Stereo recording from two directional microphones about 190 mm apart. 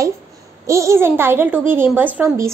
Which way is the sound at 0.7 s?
15° right (ahead or behind).